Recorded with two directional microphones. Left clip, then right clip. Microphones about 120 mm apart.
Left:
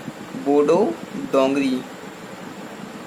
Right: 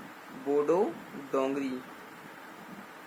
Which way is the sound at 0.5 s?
40° right (ahead or behind).